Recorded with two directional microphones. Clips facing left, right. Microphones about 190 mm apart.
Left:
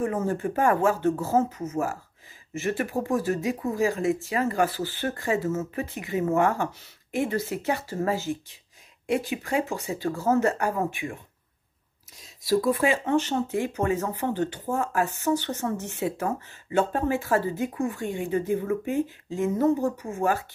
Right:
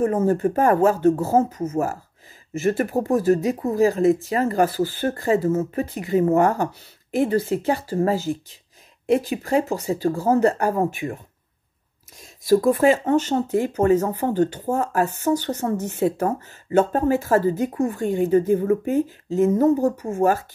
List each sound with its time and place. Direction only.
0.0 s speech: 40° right (ahead or behind)
12.2 s speech: 50° right (ahead or behind)